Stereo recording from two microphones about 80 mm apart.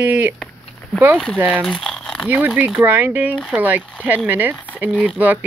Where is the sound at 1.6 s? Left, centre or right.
Centre.